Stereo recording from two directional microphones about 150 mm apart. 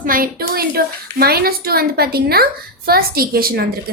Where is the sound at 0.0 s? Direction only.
70° right (ahead or behind).